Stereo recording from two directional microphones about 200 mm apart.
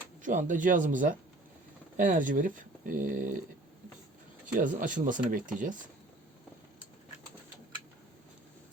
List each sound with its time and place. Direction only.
0.2 s speech: 40° right (ahead or behind)
4.5 s speech: 40° right (ahead or behind)